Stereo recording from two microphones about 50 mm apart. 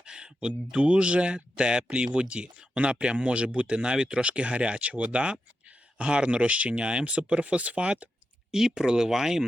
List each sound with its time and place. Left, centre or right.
0.0 s speech: centre
8.5 s speech: centre